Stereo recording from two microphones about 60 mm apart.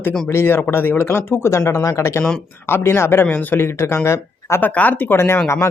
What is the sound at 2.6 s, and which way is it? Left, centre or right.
Speech, left.